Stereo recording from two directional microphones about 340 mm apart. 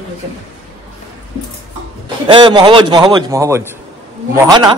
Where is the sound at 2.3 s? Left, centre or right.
Centre.